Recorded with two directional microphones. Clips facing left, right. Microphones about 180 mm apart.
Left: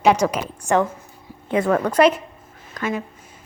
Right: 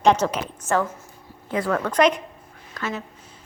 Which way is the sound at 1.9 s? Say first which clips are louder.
Left 3 dB; 5° left (ahead or behind).